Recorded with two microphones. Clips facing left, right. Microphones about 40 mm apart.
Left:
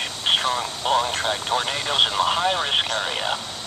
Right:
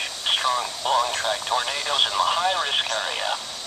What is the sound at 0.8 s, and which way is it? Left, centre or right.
Speech, centre.